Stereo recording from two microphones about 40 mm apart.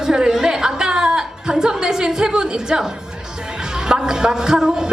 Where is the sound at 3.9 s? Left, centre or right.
Centre.